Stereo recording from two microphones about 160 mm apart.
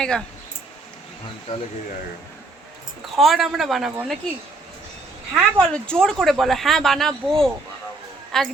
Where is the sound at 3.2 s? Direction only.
Centre (ahead or behind).